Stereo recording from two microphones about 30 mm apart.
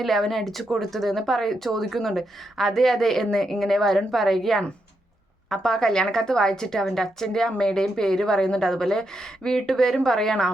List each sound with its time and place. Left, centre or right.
0.0 s speech: centre
5.5 s a woman's voice: centre